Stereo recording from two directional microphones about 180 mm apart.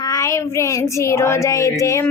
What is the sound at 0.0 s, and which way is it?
Child singing, 20° left (ahead or behind).